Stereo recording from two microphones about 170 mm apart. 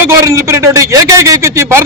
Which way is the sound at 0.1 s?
15° right (ahead or behind).